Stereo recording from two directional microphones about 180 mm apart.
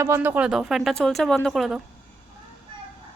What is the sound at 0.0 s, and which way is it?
Speech, 15° right (ahead or behind).